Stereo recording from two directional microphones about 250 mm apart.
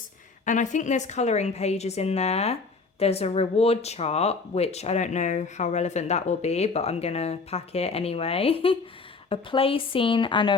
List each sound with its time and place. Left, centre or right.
0.4 s speech: left